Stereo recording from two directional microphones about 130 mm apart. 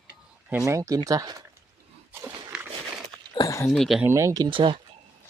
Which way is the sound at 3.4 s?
25° left (ahead or behind).